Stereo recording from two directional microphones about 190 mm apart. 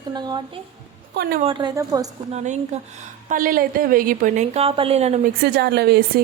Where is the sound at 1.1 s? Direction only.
60° right (ahead or behind).